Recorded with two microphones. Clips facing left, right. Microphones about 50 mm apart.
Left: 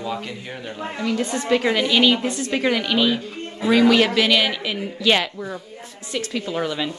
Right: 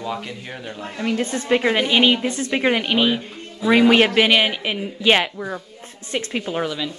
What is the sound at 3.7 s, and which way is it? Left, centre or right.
A woman's voice, right.